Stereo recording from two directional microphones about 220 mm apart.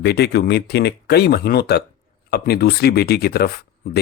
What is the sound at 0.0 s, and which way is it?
Speech, 50° left (ahead or behind).